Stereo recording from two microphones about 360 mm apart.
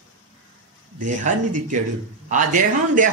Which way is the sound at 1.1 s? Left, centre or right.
Right.